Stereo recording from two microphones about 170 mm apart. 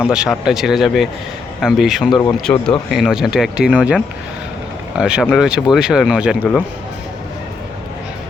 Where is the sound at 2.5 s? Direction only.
10° left (ahead or behind).